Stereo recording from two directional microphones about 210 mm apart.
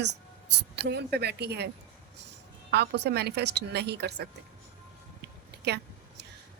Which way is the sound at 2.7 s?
55° right (ahead or behind).